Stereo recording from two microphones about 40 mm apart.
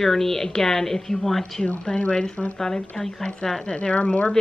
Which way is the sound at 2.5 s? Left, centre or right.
Centre.